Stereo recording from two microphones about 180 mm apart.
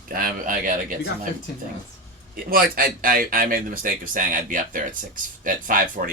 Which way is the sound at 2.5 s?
55° right (ahead or behind).